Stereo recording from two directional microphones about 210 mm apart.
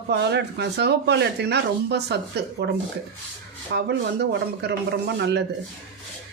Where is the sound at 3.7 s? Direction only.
50° right (ahead or behind).